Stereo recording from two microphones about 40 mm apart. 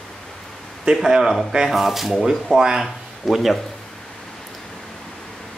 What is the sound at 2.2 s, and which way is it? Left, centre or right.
Speech, centre.